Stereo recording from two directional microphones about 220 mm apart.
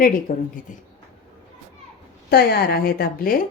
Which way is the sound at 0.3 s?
40° left (ahead or behind).